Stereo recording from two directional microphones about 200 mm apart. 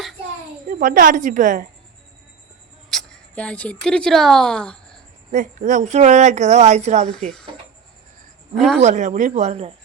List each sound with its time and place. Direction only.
0.7 s speech: 45° right (ahead or behind)
2.9 s a woman's voice: centre (ahead or behind)
5.3 s speech: 40° right (ahead or behind)
7.1 s speech: 5° left (ahead or behind)
8.5 s speech: centre (ahead or behind)
8.8 s speech: 35° right (ahead or behind)